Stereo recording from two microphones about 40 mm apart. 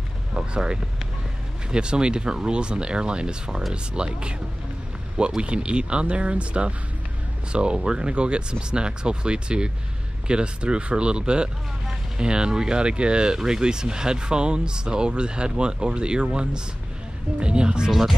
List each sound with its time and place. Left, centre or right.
1.7 s speech: right
5.4 s speech: right